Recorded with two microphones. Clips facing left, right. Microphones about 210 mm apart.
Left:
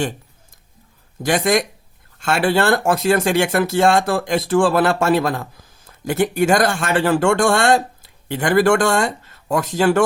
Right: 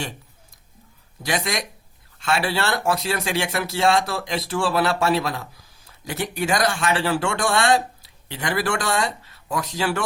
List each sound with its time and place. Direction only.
1.2 s speech: 50° left (ahead or behind)